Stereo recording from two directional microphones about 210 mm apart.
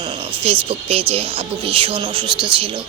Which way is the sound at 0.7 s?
25° right (ahead or behind).